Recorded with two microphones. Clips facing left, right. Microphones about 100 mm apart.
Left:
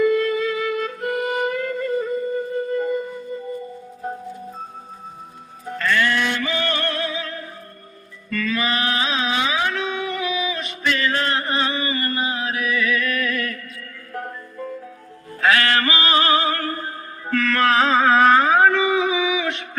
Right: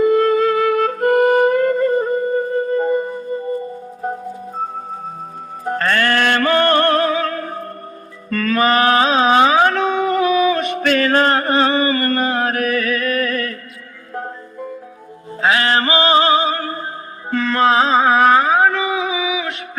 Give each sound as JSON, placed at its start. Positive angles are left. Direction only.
{"t": 0.0, "sound": "music", "side_deg": -45}
{"t": 5.6, "sound": "music", "side_deg": -50}
{"t": 14.1, "sound": "music", "side_deg": -25}